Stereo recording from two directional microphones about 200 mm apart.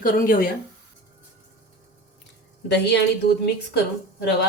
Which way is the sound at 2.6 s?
60° left (ahead or behind).